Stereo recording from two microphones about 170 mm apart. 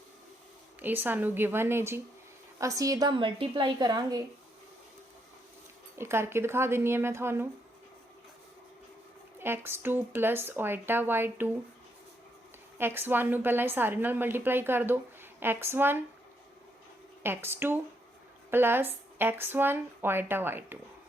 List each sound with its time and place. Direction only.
0.8 s a woman's voice: 10° right (ahead or behind)
6.0 s a woman's voice: 15° right (ahead or behind)
9.4 s a woman's voice: 15° right (ahead or behind)
12.8 s a woman's voice: 15° right (ahead or behind)
17.2 s a woman's voice: 15° right (ahead or behind)